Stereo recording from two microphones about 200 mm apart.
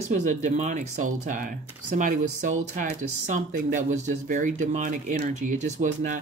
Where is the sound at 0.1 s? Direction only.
35° right (ahead or behind).